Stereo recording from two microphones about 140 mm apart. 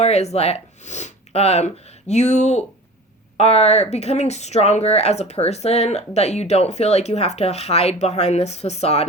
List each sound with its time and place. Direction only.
0.0 s speech: 50° left (ahead or behind)